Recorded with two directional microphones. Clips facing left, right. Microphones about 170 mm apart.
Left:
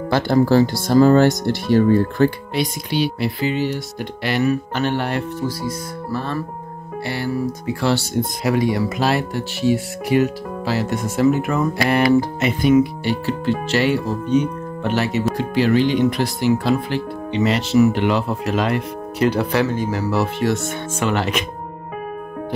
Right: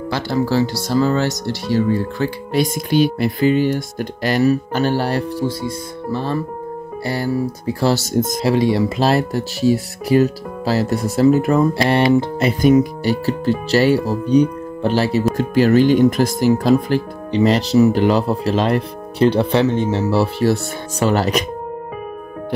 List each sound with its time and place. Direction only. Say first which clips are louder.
0.1 s speech: left 4 dB; 50° left (ahead or behind)
2.5 s speech: right 5 dB; 45° right (ahead or behind)
8.5 s speech: right 2 dB; 25° right (ahead or behind)
15.3 s speech: right 4 dB; 45° right (ahead or behind)